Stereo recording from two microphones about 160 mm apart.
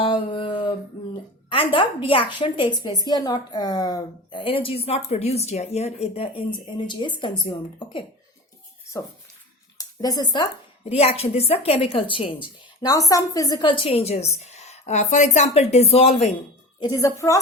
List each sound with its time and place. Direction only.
0.0 s a sound: 30° left (ahead or behind)
1.5 s a woman's voice: 35° left (ahead or behind)
9.7 s speech: 25° left (ahead or behind)
10.8 s a woman's voice: 40° left (ahead or behind)
16.8 s a woman's voice: 20° left (ahead or behind)